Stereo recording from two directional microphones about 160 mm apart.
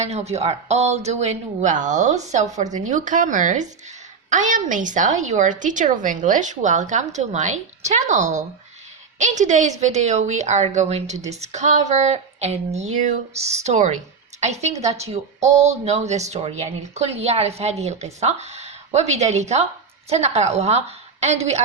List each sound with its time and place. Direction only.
0.0 s a woman's voice: 40° right (ahead or behind)